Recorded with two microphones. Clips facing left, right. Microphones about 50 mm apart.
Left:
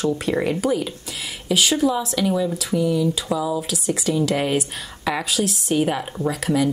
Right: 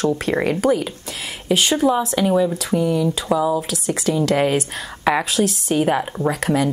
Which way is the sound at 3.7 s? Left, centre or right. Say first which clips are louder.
Right 2 dB; right.